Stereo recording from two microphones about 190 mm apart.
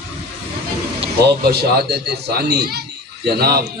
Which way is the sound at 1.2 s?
60° right (ahead or behind).